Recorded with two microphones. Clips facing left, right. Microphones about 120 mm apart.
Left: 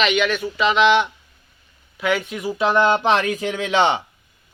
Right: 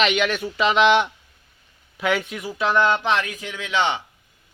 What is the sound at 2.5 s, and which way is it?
Speech, 10° left (ahead or behind).